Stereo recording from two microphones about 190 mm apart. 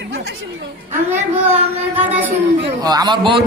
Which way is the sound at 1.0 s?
10° right (ahead or behind).